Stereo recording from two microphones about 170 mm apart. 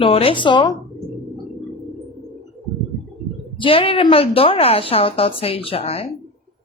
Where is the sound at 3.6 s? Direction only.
30° left (ahead or behind).